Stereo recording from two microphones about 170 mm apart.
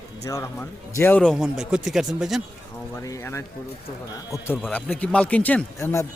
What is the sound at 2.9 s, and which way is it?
Speech, 15° left (ahead or behind).